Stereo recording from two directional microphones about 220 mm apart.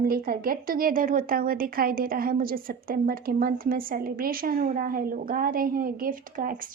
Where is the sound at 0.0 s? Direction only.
40° right (ahead or behind).